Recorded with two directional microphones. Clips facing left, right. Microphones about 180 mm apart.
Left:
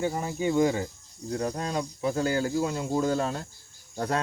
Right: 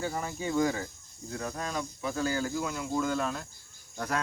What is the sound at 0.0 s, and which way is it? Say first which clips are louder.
Speech: left 6 dB; 20° left (ahead or behind).